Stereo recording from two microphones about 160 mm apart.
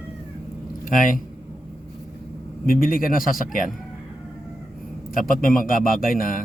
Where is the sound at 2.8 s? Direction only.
60° left (ahead or behind).